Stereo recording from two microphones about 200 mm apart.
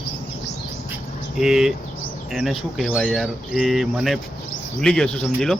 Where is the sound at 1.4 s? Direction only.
Centre (ahead or behind).